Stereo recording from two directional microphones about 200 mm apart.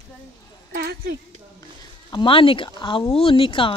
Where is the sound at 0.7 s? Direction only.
50° right (ahead or behind).